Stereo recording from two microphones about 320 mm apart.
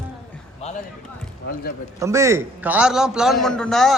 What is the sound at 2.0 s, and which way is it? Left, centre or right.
A man's voice, centre.